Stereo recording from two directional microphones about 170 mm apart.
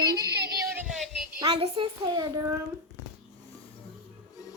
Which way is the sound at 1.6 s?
30° right (ahead or behind).